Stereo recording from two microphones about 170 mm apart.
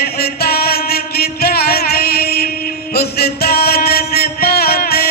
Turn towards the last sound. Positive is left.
turn(degrees=65)  # may be behind; listen again after turning